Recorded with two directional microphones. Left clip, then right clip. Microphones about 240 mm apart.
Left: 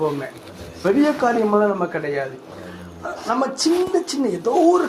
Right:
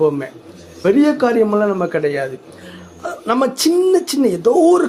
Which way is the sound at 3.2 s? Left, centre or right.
Right.